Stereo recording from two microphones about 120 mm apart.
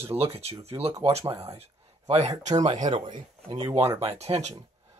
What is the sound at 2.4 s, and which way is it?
Speech, 75° right (ahead or behind).